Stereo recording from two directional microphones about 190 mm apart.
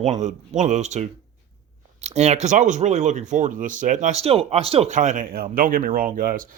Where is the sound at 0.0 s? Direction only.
40° right (ahead or behind).